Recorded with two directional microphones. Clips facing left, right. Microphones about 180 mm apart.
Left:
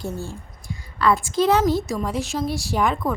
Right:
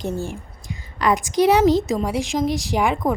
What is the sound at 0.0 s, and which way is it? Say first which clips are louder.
A woman's voice: right 4 dB; 15° right (ahead or behind).